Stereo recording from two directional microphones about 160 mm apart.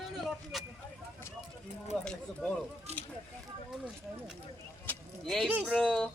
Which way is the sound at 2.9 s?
40° right (ahead or behind).